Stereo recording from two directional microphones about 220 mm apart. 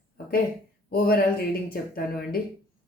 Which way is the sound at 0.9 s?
45° left (ahead or behind).